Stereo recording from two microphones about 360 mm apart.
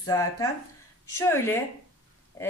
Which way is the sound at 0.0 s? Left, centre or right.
Centre.